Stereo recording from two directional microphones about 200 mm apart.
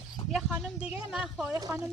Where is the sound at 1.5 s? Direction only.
15° right (ahead or behind).